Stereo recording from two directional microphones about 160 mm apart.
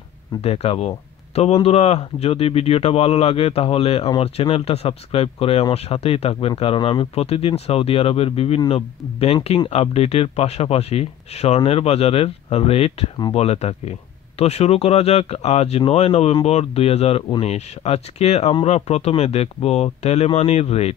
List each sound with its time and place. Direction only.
0.4 s speech: 40° left (ahead or behind)